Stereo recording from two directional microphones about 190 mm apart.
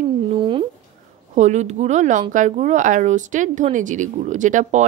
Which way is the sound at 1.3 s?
40° right (ahead or behind).